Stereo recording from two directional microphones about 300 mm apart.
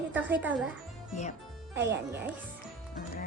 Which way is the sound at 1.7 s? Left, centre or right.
Centre.